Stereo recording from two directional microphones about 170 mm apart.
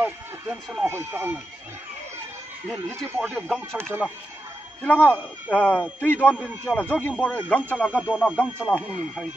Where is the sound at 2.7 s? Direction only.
15° right (ahead or behind).